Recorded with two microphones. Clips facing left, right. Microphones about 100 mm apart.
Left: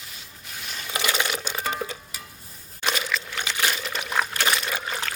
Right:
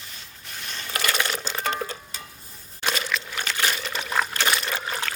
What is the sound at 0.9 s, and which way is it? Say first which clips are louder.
Sewing machine: even; 10° left (ahead or behind).